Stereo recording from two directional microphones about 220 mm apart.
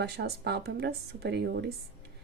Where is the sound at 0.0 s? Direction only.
50° right (ahead or behind).